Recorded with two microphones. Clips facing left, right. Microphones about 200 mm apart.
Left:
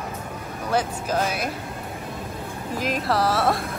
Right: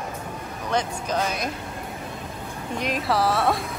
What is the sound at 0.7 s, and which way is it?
Speech, 5° left (ahead or behind).